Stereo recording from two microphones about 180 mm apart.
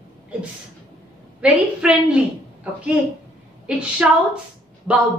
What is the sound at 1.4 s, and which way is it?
Speech, 5° right (ahead or behind).